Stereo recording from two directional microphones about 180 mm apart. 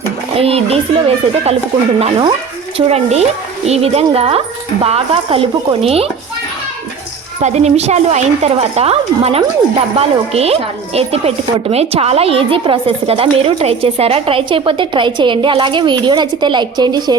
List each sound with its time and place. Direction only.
0.3 s speech: 35° right (ahead or behind)
7.4 s speech: 35° right (ahead or behind)